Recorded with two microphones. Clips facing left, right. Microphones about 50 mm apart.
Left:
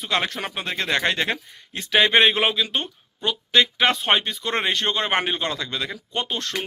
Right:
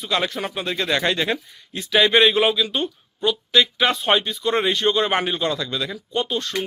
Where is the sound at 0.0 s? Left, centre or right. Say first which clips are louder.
Right 1 dB; left.